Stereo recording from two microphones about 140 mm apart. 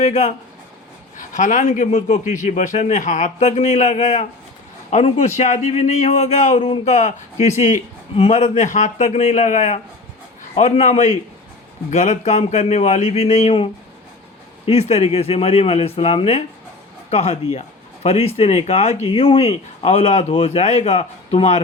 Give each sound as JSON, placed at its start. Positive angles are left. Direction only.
{"t": 0.0, "sound": "a man's voice", "side_deg": 55}
{"t": 14.7, "sound": "speech", "side_deg": 50}